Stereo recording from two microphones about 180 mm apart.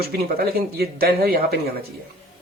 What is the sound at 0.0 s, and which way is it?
Speech, 55° right (ahead or behind).